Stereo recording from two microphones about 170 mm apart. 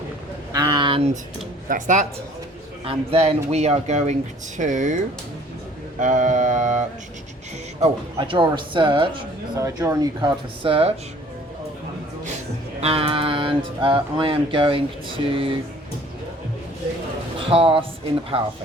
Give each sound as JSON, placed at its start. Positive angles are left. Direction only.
{"t": 0.5, "sound": "a sound", "side_deg": -25}
{"t": 1.6, "sound": "speech", "side_deg": -50}
{"t": 2.8, "sound": "speech", "side_deg": -35}
{"t": 6.0, "sound": "a sound", "side_deg": -45}
{"t": 7.8, "sound": "speech", "side_deg": -30}
{"t": 9.6, "sound": "speech", "side_deg": -20}
{"t": 12.8, "sound": "speech", "side_deg": -35}
{"t": 17.3, "sound": "speech", "side_deg": -30}